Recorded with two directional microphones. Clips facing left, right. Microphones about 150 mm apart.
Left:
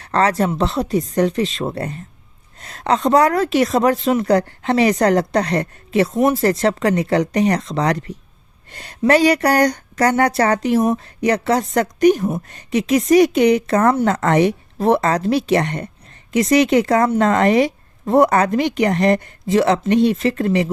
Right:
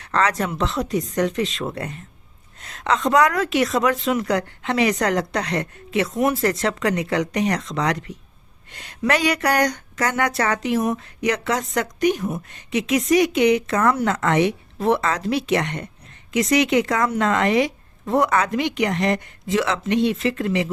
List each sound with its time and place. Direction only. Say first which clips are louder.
0.0 s speech: left 4 dB; 35° left (ahead or behind)